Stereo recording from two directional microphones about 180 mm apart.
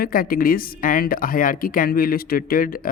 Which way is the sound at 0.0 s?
55° left (ahead or behind).